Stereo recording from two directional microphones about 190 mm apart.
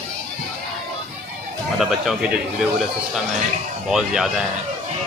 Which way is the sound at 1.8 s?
Centre (ahead or behind).